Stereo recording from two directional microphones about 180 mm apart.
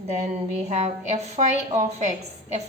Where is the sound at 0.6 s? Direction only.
40° right (ahead or behind).